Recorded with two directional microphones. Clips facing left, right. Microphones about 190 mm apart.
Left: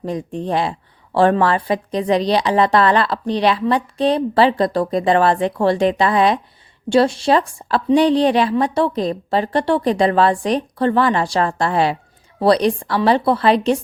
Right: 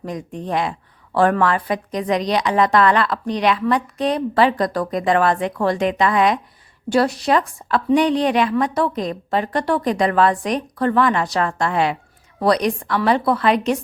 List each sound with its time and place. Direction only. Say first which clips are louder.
0.0 s speech: left 4 dB; 30° left (ahead or behind)